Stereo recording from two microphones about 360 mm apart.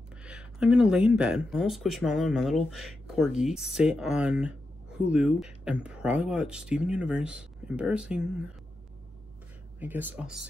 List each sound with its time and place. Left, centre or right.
0.2 s speech: centre
9.8 s speech: centre